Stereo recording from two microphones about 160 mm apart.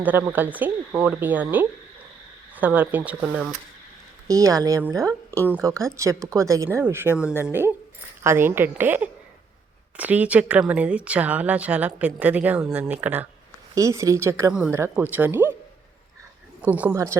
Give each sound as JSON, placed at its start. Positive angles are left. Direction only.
{"t": 0.0, "sound": "speech", "side_deg": -10}
{"t": 4.3, "sound": "speech", "side_deg": -20}
{"t": 16.6, "sound": "speech", "side_deg": -10}